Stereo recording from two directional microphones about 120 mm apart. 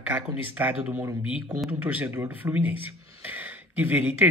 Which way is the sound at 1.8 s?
15° right (ahead or behind).